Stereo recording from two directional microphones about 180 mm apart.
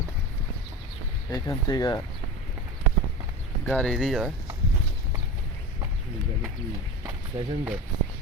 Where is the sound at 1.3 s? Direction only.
20° left (ahead or behind).